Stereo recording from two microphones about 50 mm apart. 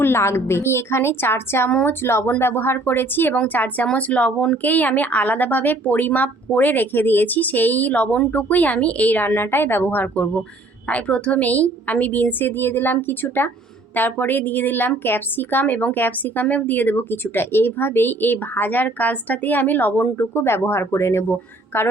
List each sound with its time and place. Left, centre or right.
0.0 s a woman's voice: left
3.3 s a woman's voice: left
10.8 s a woman's voice: left